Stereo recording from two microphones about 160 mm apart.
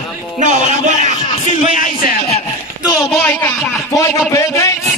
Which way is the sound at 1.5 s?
50° left (ahead or behind).